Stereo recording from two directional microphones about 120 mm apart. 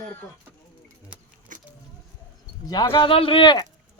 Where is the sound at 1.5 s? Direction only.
90° right.